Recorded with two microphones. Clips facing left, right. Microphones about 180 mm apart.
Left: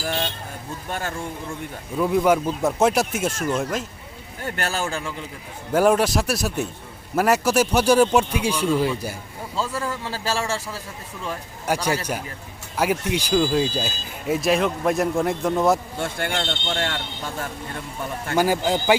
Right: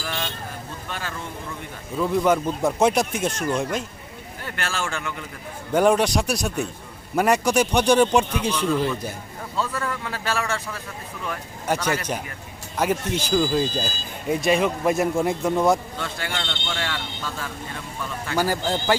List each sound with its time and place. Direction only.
0.0 s vehicle: 40° left (ahead or behind)
0.9 s speech: 45° left (ahead or behind)
2.0 s speech: 10° left (ahead or behind)
4.4 s speech: 40° left (ahead or behind)
5.7 s speech: 5° left (ahead or behind)
9.6 s a man's voice: 25° left (ahead or behind)
11.6 s a man's voice: 10° left (ahead or behind)
16.0 s speech: 55° left (ahead or behind)
16.3 s speech: 35° left (ahead or behind)
18.3 s speech: 15° left (ahead or behind)